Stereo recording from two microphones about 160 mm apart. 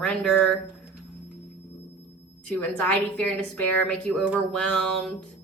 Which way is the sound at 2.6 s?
10° left (ahead or behind).